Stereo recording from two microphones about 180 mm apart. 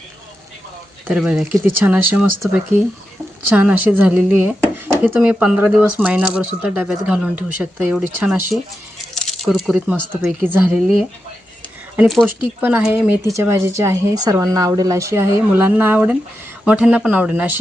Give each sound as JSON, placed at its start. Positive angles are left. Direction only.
{"t": 1.0, "sound": "speech", "side_deg": -5}
{"t": 3.5, "sound": "speech", "side_deg": -10}
{"t": 11.9, "sound": "speech", "side_deg": 0}